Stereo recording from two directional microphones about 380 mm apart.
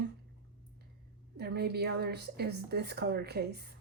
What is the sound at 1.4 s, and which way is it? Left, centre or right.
Speech, right.